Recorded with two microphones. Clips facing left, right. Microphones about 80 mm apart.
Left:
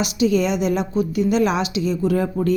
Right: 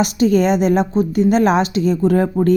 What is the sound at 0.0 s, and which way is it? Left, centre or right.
A woman's voice, right.